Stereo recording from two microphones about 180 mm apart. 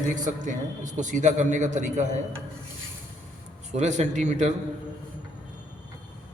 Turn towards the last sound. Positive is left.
turn(degrees=-40)  # may be behind; listen again after turning